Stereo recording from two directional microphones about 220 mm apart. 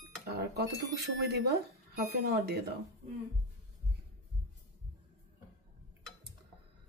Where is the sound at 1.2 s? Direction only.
50° right (ahead or behind).